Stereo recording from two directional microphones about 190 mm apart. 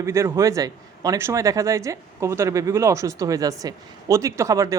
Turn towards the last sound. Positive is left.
turn(degrees=-15)  # may be behind; listen again after turning